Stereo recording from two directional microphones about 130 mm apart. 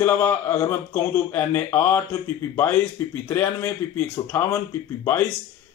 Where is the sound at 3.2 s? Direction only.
20° left (ahead or behind).